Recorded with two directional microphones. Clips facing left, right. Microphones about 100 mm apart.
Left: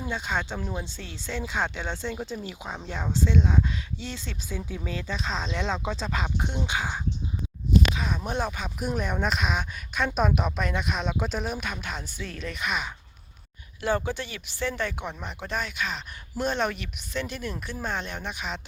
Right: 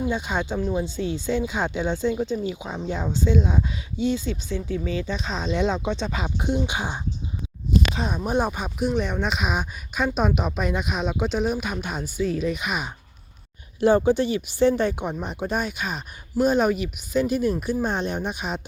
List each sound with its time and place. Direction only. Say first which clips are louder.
0.0 s speech: right 5 dB; 10° right (ahead or behind)
4.4 s speech: right 7 dB; 5° left (ahead or behind)
6.7 s speech: right 1 dB; 20° right (ahead or behind)
8.1 s speech: right 6 dB; 15° right (ahead or behind)
8.8 s speech: right 4 dB; 5° left (ahead or behind)
9.5 s speech: right 3 dB; 10° right (ahead or behind)
10.1 s speech: right 2 dB; centre (ahead or behind)
13.7 s speech: right 9 dB; 20° right (ahead or behind)